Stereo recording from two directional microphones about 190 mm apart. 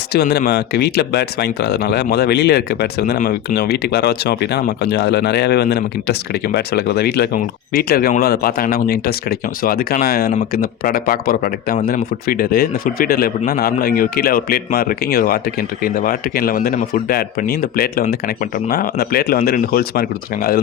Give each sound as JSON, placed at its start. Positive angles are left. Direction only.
{"t": 0.1, "sound": "speech", "side_deg": 60}